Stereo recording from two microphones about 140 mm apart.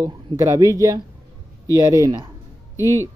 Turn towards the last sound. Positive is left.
turn(degrees=25)  # may be behind; listen again after turning